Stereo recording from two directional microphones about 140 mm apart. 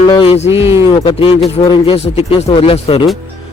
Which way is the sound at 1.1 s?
35° left (ahead or behind).